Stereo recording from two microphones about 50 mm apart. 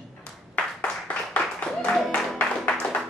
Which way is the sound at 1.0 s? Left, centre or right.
Left.